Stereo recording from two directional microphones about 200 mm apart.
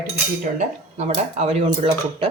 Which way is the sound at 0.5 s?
35° right (ahead or behind).